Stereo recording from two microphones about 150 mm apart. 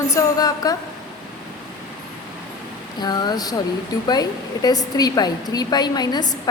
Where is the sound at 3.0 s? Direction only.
30° left (ahead or behind).